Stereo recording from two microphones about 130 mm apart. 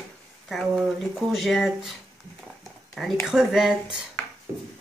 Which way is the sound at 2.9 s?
Centre (ahead or behind).